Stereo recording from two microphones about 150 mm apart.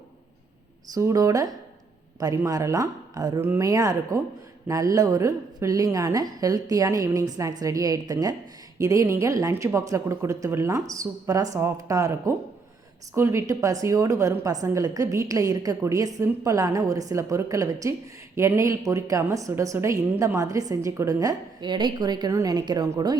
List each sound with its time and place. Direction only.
0.9 s a woman's voice: 20° right (ahead or behind)